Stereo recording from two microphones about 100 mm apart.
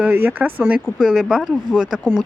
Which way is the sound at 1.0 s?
Centre (ahead or behind).